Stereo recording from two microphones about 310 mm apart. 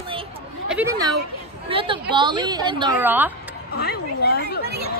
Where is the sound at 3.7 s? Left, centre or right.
Left.